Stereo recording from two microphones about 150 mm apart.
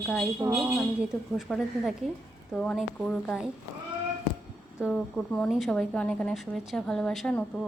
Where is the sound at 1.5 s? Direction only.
Centre (ahead or behind).